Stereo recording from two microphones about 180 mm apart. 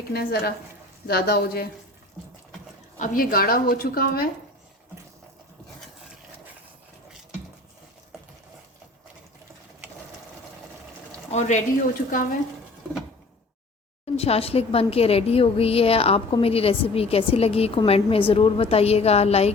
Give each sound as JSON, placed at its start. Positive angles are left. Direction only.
{"t": 0.1, "sound": "a woman's voice", "side_deg": 60}
{"t": 3.0, "sound": "a woman's voice", "side_deg": 50}
{"t": 11.3, "sound": "speech", "side_deg": 40}
{"t": 14.2, "sound": "a woman's voice", "side_deg": 35}